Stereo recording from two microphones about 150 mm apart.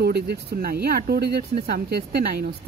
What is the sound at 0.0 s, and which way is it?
A woman's voice, 90° right.